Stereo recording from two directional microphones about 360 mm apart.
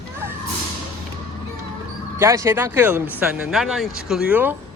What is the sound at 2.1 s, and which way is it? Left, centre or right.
Speech, centre.